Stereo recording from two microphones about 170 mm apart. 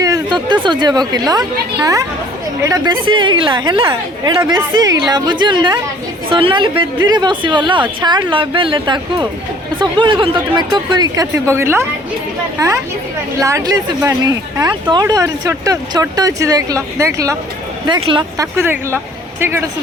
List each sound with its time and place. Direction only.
0.0 s speech: 25° right (ahead or behind)
17.8 s speech: 30° right (ahead or behind)
18.3 s speech: 15° right (ahead or behind)